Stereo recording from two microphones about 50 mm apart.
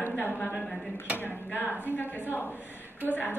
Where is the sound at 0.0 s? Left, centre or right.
Left.